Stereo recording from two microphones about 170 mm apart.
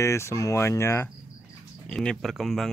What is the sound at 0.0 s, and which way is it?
Speech, 15° left (ahead or behind).